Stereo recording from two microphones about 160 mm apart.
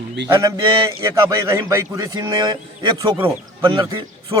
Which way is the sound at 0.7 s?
30° right (ahead or behind).